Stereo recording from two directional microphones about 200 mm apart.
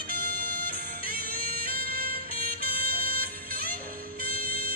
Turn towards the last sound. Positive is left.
turn(degrees=-45)  # may be behind; listen again after turning